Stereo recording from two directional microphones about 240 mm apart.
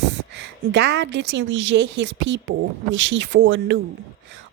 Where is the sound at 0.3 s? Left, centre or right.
Right.